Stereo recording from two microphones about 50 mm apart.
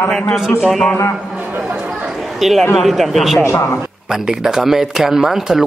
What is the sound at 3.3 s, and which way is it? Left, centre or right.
Speech, left.